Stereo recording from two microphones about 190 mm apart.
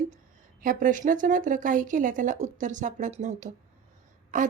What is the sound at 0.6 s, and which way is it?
Speech, 45° right (ahead or behind).